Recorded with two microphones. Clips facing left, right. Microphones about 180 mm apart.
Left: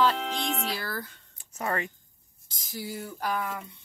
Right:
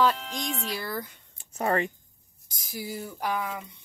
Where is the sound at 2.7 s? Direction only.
10° right (ahead or behind).